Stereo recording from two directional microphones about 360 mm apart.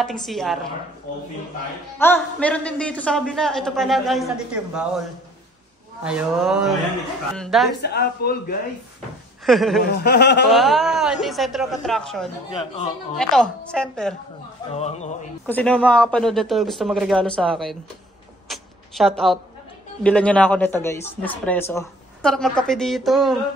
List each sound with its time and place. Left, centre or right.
0.0 s speech: centre
2.0 s speech: centre
6.0 s speech: centre
7.8 s speech: left
9.5 s speech: centre
9.8 s speech: left
10.5 s speech: centre
12.5 s speech: centre
13.1 s speech: centre
14.7 s speech: centre
15.4 s speech: centre
18.5 s a sound: centre
20.0 s speech: centre